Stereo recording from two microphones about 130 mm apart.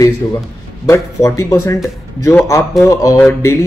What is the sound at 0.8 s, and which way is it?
Speech, 25° left (ahead or behind).